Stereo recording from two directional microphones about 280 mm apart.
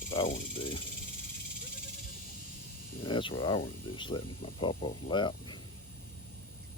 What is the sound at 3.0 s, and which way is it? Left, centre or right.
Speech, centre.